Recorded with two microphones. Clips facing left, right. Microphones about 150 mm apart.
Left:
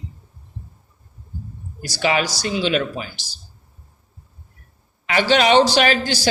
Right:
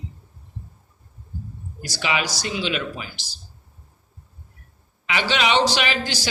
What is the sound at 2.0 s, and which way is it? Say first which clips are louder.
Speech: left 5 dB; 45° left (ahead or behind).